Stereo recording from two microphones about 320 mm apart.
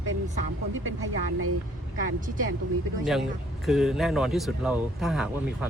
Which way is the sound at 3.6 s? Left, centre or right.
Centre.